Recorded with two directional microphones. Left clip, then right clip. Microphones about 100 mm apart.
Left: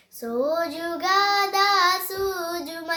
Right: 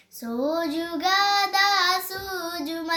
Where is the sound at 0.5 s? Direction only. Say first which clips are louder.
Left 1 dB; 35° left (ahead or behind).